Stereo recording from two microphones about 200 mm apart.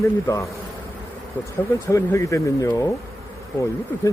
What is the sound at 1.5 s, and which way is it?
Speech, 15° left (ahead or behind).